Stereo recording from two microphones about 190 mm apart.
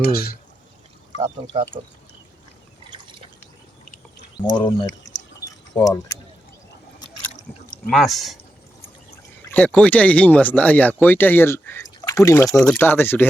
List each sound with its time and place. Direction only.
0.0 s speech: 55° left (ahead or behind)
1.2 s speech: 35° right (ahead or behind)
4.4 s speech: 20° left (ahead or behind)
5.5 s mechanisms: 20° left (ahead or behind)
7.9 s speech: centre (ahead or behind)
9.5 s speech: 5° left (ahead or behind)